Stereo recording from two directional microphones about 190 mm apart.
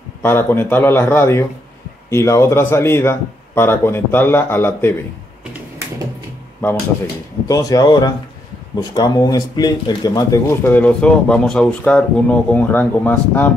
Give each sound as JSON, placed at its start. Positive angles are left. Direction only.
{"t": 0.2, "sound": "speech", "side_deg": 10}
{"t": 7.4, "sound": "speech", "side_deg": 20}